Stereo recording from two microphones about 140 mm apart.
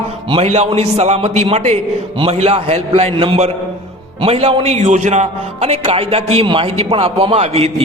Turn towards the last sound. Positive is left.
turn(degrees=-50)  # may be behind; listen again after turning